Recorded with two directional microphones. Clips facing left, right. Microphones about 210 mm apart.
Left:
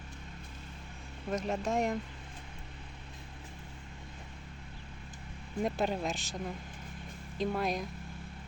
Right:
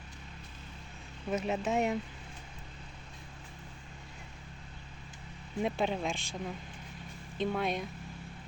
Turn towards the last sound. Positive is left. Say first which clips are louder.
# even
turn(degrees=0)  # may be behind; listen again after turning